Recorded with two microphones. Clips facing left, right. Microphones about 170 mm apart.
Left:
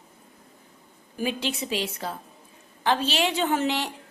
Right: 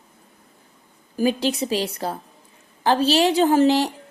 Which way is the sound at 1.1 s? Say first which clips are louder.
Right 8 dB; 40° right (ahead or behind).